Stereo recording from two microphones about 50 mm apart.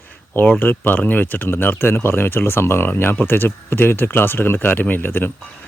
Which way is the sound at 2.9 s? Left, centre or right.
Left.